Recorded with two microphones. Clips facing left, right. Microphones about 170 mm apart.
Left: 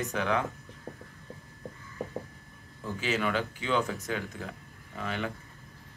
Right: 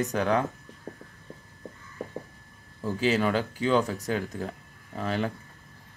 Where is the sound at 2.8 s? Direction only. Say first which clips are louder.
Right 6 dB; 35° right (ahead or behind).